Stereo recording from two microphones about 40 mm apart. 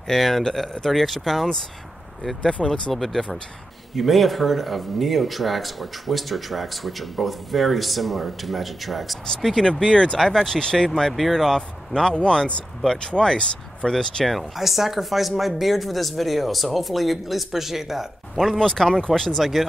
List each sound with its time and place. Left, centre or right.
0.1 s speech: centre
2.9 s speech: centre
9.7 s speech: centre
10.2 s speech: centre
11.1 s speech: centre
14.2 s speech: centre
18.4 s speech: centre
19.3 s speech: centre